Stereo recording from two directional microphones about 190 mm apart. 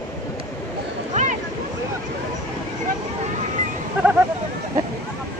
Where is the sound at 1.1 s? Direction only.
40° right (ahead or behind).